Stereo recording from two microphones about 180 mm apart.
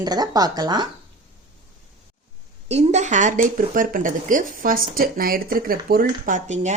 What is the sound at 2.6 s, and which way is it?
Speech, 35° right (ahead or behind).